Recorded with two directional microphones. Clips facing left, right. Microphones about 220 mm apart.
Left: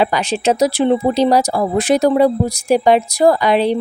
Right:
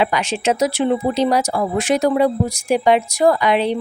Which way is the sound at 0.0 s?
35° left (ahead or behind).